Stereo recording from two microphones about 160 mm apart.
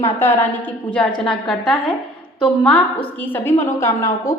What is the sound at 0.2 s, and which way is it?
A woman's voice, 15° left (ahead or behind).